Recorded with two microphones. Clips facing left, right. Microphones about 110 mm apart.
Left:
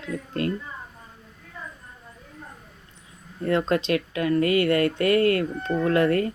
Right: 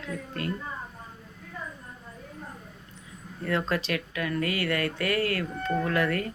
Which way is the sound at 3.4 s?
30° left (ahead or behind).